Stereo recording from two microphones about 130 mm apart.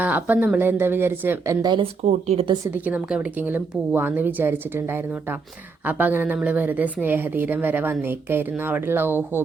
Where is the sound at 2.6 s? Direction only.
15° right (ahead or behind).